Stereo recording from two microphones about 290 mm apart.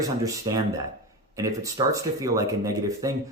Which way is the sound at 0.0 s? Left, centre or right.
Centre.